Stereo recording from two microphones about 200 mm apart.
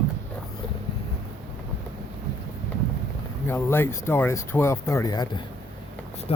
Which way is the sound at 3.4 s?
10° left (ahead or behind).